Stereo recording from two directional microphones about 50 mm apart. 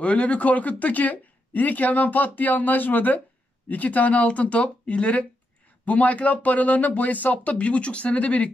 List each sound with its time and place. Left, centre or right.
0.0 s speech: left